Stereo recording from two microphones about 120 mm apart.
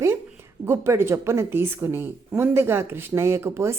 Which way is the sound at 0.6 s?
20° right (ahead or behind).